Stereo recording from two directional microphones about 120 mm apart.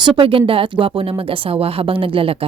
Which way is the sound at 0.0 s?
50° right (ahead or behind).